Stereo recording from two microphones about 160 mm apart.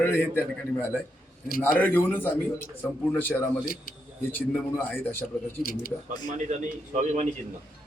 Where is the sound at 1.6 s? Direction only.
10° left (ahead or behind).